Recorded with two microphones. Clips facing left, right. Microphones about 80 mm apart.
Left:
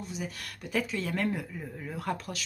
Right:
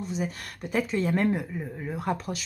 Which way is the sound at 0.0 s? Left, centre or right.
Right.